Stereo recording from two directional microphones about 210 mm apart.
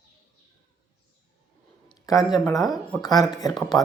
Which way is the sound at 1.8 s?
15° left (ahead or behind).